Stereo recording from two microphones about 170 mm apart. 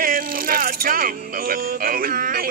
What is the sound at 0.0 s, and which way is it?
Speech, 55° right (ahead or behind).